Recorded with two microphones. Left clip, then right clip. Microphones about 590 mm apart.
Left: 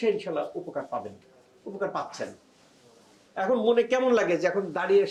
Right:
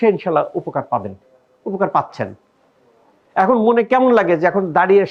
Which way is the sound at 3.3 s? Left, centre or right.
Right.